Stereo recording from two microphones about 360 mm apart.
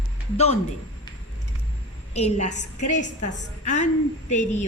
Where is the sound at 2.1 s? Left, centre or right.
Centre.